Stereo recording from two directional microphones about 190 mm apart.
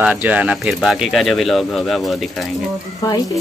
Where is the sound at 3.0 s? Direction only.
20° left (ahead or behind).